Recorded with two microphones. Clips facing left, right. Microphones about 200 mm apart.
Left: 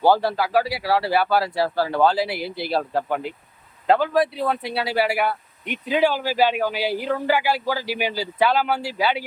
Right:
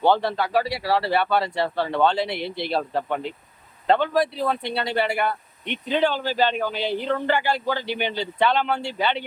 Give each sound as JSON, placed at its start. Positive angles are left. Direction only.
{"t": 0.0, "sound": "speech", "side_deg": 5}